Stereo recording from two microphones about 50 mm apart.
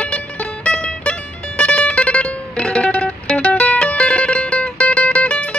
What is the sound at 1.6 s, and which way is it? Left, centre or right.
Music, left.